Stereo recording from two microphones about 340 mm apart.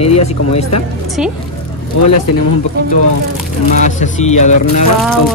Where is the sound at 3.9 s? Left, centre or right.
Left.